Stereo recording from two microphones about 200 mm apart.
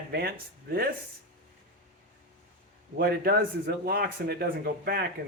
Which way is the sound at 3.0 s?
50° right (ahead or behind).